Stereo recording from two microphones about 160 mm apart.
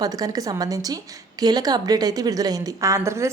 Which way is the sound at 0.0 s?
25° right (ahead or behind).